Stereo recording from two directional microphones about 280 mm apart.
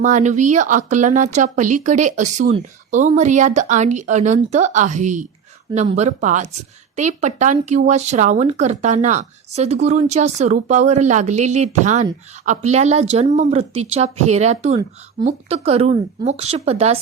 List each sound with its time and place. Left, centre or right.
0.0 s speech: right